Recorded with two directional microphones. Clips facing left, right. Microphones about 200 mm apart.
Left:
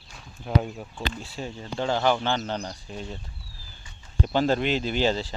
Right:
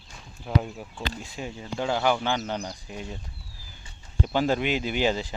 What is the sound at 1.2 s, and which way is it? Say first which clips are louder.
Speech: left 1 dB; 15° right (ahead or behind).